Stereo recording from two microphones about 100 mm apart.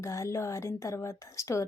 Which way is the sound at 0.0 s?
30° left (ahead or behind).